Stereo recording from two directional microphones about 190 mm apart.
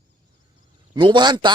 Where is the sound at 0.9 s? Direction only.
25° right (ahead or behind).